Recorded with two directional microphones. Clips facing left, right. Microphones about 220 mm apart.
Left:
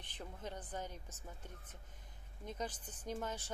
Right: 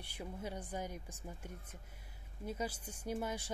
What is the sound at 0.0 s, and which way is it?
Speech, 10° right (ahead or behind).